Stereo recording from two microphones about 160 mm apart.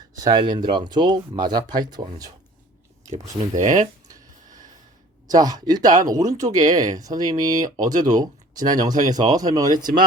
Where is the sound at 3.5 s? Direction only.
50° right (ahead or behind).